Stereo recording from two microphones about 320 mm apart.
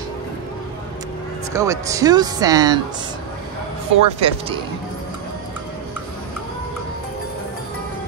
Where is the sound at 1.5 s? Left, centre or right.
Centre.